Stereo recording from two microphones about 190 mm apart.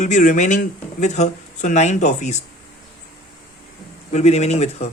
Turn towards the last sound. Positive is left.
turn(degrees=35)  # may be behind; listen again after turning